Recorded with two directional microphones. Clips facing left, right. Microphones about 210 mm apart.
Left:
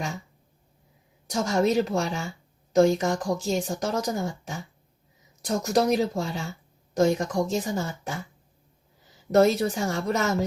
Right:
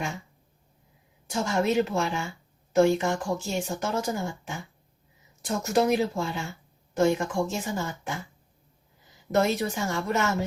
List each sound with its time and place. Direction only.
1.3 s a woman's voice: 40° left (ahead or behind)
9.3 s a woman's voice: 35° left (ahead or behind)